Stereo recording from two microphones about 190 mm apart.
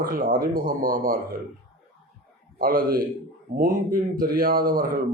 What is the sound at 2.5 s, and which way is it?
Speech, 50° right (ahead or behind).